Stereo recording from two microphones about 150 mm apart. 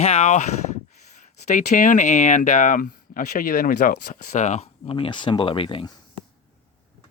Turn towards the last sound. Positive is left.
turn(degrees=35)  # may be behind; listen again after turning